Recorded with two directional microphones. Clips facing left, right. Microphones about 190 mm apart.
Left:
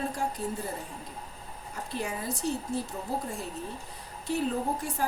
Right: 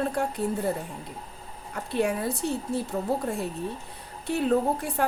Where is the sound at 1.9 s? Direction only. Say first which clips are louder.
Right 8 dB; 65° right (ahead or behind).